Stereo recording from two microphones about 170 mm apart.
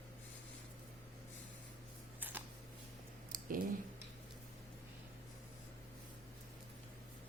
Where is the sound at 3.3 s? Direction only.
55° right (ahead or behind).